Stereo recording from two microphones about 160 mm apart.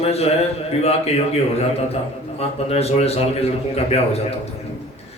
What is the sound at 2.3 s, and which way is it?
A man's voice, 40° left (ahead or behind).